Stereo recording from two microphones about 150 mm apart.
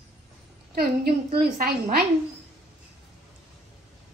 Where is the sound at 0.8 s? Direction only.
90° right.